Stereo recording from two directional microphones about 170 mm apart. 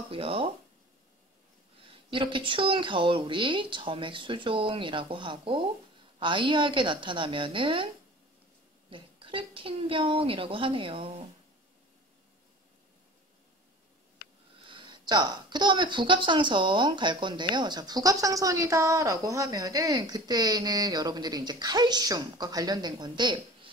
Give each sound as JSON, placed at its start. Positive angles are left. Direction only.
{"t": 0.1, "sound": "a woman's voice", "side_deg": -35}
{"t": 2.0, "sound": "speech", "side_deg": -30}
{"t": 8.9, "sound": "a woman's voice", "side_deg": -30}
{"t": 14.7, "sound": "speech", "side_deg": -25}